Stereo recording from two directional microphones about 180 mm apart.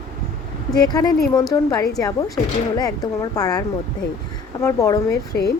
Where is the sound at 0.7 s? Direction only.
20° left (ahead or behind).